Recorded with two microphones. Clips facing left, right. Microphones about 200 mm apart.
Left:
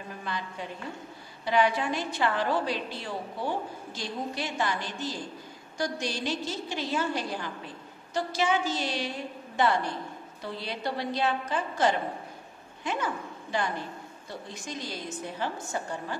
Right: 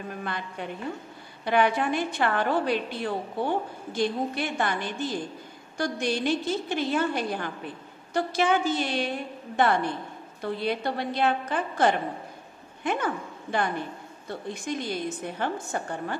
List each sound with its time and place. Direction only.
0.2 s a woman's voice: 60° right (ahead or behind)